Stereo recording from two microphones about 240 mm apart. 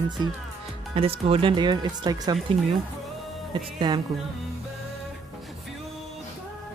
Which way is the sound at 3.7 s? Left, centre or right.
Centre.